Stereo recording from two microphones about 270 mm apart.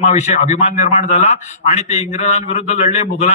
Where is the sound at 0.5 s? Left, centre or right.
Left.